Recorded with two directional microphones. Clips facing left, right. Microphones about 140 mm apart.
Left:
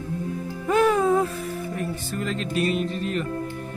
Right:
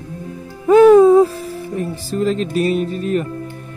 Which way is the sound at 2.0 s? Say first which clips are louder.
Right 10 dB; 30° right (ahead or behind).